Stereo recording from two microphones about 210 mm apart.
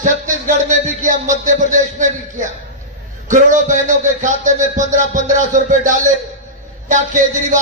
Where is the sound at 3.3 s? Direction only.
35° right (ahead or behind).